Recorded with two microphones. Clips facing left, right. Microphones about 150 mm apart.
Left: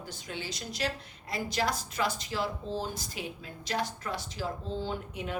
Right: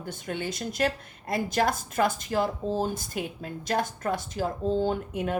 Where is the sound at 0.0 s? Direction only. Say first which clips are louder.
Right 7 dB; 55° right (ahead or behind).